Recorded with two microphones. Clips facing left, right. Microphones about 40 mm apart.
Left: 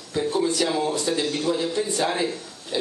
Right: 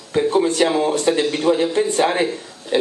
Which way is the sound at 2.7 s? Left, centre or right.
Right.